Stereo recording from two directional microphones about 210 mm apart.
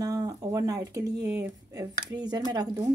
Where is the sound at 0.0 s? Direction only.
15° right (ahead or behind).